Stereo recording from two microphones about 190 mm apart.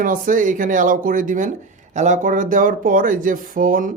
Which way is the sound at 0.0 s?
45° right (ahead or behind).